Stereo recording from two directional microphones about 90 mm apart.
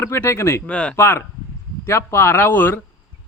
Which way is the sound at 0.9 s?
25° left (ahead or behind).